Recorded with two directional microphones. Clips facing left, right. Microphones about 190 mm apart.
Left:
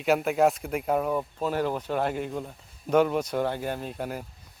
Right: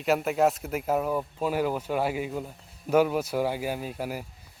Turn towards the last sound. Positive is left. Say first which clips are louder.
# even
turn(degrees=-5)  # may be behind; listen again after turning